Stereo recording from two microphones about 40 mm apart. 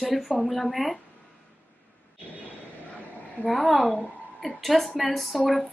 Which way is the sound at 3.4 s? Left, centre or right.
Centre.